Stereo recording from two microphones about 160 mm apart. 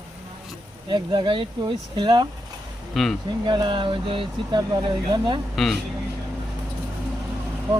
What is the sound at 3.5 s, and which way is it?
Speech, 30° right (ahead or behind).